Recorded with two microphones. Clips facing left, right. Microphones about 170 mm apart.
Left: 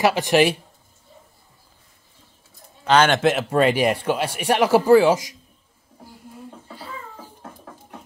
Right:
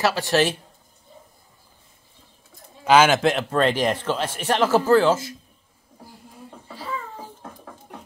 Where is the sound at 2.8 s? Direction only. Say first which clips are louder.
Even; 5° right (ahead or behind); by 5.4 s 10° left (ahead or behind).